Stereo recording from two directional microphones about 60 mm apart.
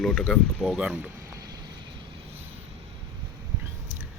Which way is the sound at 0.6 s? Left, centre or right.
Centre.